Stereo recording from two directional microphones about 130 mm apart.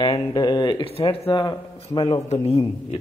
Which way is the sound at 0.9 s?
45° left (ahead or behind).